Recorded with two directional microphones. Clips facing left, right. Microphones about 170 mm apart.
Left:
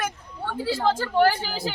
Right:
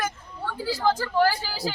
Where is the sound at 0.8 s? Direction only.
25° left (ahead or behind).